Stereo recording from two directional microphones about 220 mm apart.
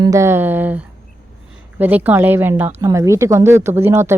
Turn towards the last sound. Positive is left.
turn(degrees=-10)  # may be behind; listen again after turning